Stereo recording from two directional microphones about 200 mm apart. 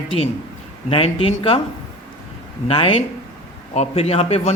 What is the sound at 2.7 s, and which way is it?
Speech, 25° left (ahead or behind).